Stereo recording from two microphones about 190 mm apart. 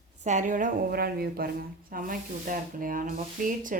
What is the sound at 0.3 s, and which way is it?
Speech, 40° right (ahead or behind).